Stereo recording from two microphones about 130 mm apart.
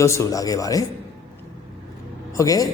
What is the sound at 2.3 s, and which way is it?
Speech, 25° left (ahead or behind).